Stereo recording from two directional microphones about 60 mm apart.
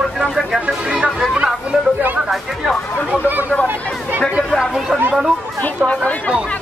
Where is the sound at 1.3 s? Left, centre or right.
Centre.